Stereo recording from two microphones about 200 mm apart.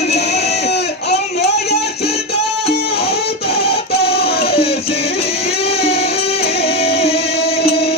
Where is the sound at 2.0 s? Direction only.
30° left (ahead or behind).